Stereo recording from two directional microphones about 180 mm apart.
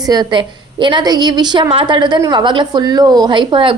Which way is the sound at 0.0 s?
20° right (ahead or behind).